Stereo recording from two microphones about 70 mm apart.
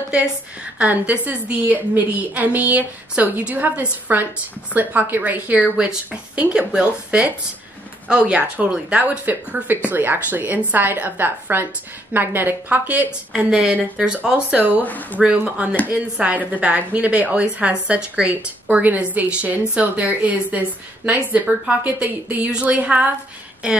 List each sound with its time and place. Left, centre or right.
0.1 s a woman's voice: centre
5.8 s a woman's voice: centre
13.5 s speech: centre
14.9 s speech: left
15.1 s a woman's voice: centre